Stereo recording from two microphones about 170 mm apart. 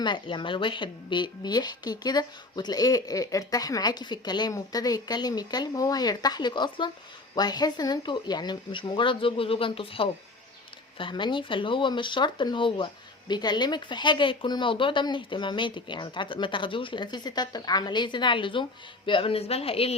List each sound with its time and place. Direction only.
0.0 s speech: 25° left (ahead or behind)